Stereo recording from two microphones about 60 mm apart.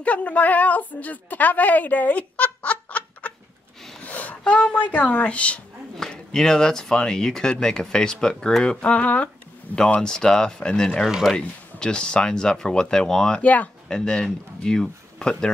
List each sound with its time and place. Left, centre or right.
0.0 s a woman's voice: left
5.9 s speech: centre
11.1 s speech: centre
11.3 s speech: centre
13.4 s speech: left
13.8 s speech: centre